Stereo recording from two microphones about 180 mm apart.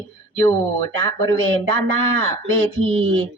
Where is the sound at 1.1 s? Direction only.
20° left (ahead or behind).